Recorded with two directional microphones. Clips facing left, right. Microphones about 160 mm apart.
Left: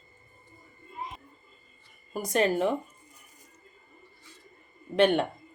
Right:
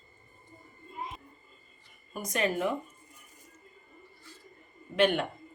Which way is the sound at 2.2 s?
30° left (ahead or behind).